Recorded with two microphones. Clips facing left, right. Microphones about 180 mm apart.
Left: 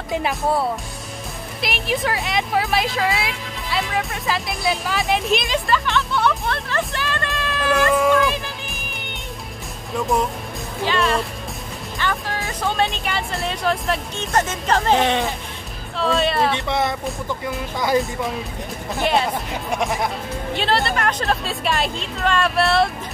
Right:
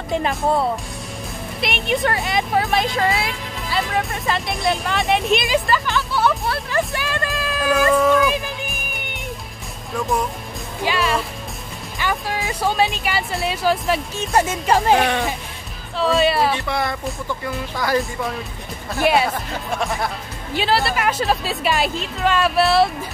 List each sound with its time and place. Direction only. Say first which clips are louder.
0.1 s speech: right 1 dB; 5° left (ahead or behind)
10.9 s speech: left 1 dB; 5° right (ahead or behind)
16.5 s speech: left 1 dB; 20° left (ahead or behind)
19.0 s speech: right 3 dB; 5° right (ahead or behind)
19.7 s speech: left 1 dB; 20° left (ahead or behind)
20.5 s speech: right 2 dB; 5° right (ahead or behind)